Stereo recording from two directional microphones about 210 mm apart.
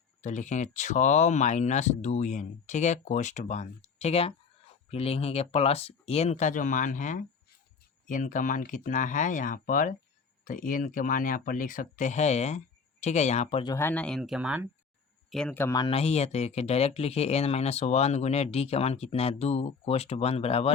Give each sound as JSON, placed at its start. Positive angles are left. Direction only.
{"t": 0.2, "sound": "speech", "side_deg": 35}
{"t": 13.7, "sound": "speech", "side_deg": 10}